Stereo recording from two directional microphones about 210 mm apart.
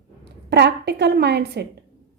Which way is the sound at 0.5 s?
55° right (ahead or behind).